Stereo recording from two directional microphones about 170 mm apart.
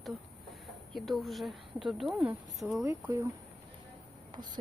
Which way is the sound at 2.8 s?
15° right (ahead or behind).